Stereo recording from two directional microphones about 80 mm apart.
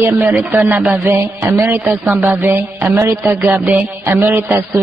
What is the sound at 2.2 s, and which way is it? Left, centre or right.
Speech, right.